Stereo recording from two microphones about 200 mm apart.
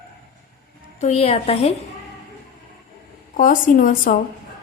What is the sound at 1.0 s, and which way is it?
Speech, 30° left (ahead or behind).